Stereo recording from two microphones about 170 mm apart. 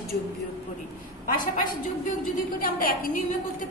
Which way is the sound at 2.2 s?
55° left (ahead or behind).